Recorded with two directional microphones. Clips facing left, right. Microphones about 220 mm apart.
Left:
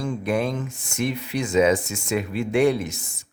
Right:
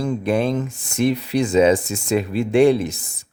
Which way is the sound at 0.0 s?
35° right (ahead or behind).